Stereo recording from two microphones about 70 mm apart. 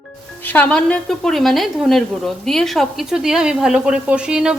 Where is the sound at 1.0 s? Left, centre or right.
Centre.